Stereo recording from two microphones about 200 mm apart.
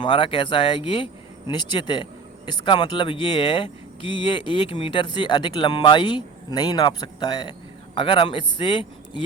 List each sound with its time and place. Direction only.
0.0 s speech: 25° left (ahead or behind)
4.0 s speech: 65° right (ahead or behind)
4.3 s speech: 25° left (ahead or behind)